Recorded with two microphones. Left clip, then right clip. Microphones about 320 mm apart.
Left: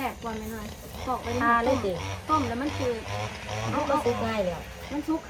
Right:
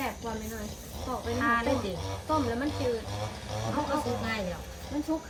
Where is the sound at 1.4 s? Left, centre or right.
Centre.